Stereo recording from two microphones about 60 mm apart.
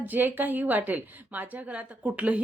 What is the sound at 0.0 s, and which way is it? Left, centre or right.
A woman's voice, right.